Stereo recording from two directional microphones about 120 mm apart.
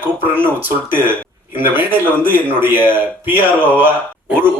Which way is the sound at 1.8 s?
15° right (ahead or behind).